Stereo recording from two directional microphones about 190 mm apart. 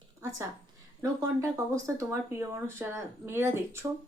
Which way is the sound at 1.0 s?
15° right (ahead or behind).